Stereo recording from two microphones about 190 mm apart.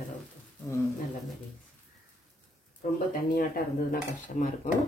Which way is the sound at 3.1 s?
50° left (ahead or behind).